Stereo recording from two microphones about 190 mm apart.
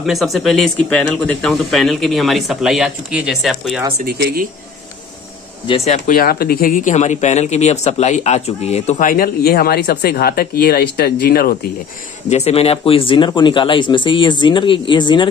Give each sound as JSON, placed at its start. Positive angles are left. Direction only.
{"t": 0.0, "sound": "speech", "side_deg": 0}
{"t": 4.0, "sound": "speech", "side_deg": -50}
{"t": 5.7, "sound": "speech", "side_deg": 40}
{"t": 12.3, "sound": "speech", "side_deg": 35}